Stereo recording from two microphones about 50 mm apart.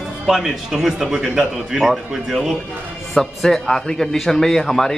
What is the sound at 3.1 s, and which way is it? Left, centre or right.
A man's voice, centre.